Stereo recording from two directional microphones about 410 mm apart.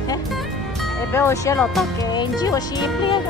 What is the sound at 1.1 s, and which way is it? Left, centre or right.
Speech, centre.